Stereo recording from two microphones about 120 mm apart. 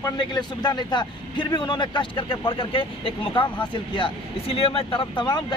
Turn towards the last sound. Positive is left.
turn(degrees=45)  # may be behind; listen again after turning